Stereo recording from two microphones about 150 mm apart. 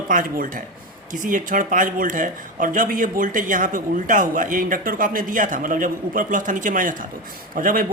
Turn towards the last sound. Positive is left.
turn(degrees=-70)  # may be behind; listen again after turning